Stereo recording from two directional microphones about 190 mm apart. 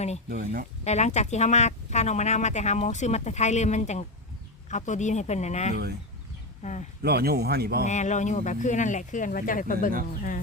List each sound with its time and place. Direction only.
0.3 s speech: 50° right (ahead or behind)
0.9 s speech: 35° left (ahead or behind)
5.7 s speech: 55° right (ahead or behind)
6.6 s speech: 35° left (ahead or behind)
7.0 s speech: 55° right (ahead or behind)
7.9 s speech: 40° left (ahead or behind)